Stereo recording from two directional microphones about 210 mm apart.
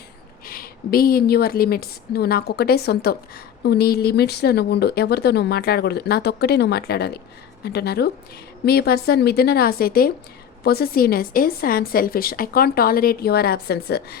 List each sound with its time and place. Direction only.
0.4 s speech: 45° left (ahead or behind)